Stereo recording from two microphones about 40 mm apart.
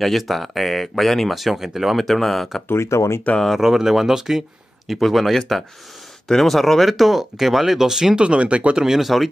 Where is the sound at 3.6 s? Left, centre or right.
Centre.